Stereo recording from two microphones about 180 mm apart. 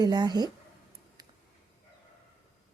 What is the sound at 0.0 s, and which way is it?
Speech, 25° right (ahead or behind).